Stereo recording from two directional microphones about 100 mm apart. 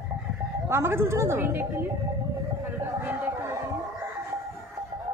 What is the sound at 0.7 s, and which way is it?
Speech, 25° right (ahead or behind).